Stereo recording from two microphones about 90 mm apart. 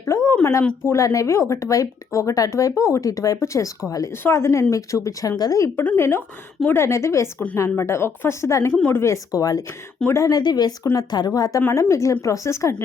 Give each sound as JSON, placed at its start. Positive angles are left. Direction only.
{"t": 0.1, "sound": "a sound", "side_deg": 35}
{"t": 0.9, "sound": "speech", "side_deg": 35}
{"t": 4.2, "sound": "a woman's voice", "side_deg": 30}
{"t": 9.3, "sound": "speech", "side_deg": 40}
{"t": 10.1, "sound": "a woman's voice", "side_deg": 30}
{"t": 10.3, "sound": "speech", "side_deg": 50}